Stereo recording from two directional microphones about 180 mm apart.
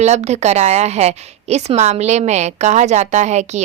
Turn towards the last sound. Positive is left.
turn(degrees=-40)  # may be behind; listen again after turning